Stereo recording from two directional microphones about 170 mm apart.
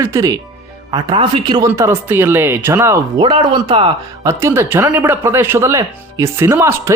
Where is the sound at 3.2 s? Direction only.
30° right (ahead or behind).